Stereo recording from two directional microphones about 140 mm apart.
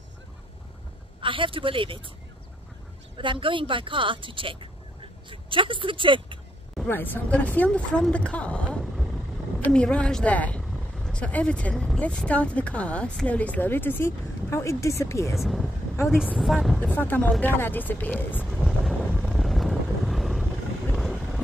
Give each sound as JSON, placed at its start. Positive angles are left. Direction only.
{"t": 1.2, "sound": "speech", "side_deg": -40}
{"t": 3.2, "sound": "speech", "side_deg": -35}
{"t": 6.9, "sound": "speech", "side_deg": 15}
{"t": 15.3, "sound": "speech", "side_deg": 0}
{"t": 16.8, "sound": "speech", "side_deg": 15}
{"t": 18.4, "sound": "vehicle", "side_deg": -5}